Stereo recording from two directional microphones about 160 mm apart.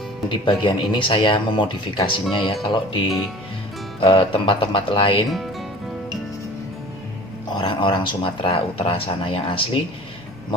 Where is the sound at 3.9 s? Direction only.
35° left (ahead or behind).